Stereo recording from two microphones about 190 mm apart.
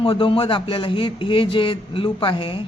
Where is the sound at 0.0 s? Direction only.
25° left (ahead or behind).